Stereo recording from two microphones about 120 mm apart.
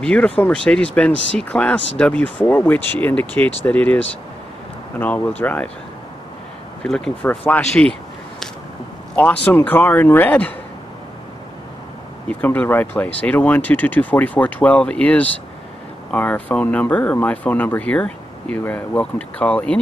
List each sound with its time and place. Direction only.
0.0 s speech: 10° left (ahead or behind)
7.2 s speech: 15° left (ahead or behind)
9.1 s speech: 10° left (ahead or behind)
12.3 s speech: 15° left (ahead or behind)